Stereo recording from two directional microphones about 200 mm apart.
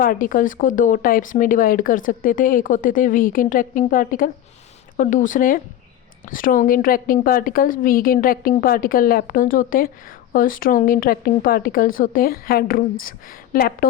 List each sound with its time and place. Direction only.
0.0 s a woman's voice: 45° left (ahead or behind)